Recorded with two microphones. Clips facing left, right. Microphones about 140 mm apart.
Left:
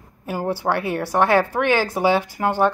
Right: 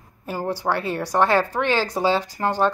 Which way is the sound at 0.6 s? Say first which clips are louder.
Left 1 dB; 15° left (ahead or behind).